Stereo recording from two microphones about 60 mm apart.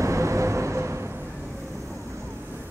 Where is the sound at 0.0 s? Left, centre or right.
Right.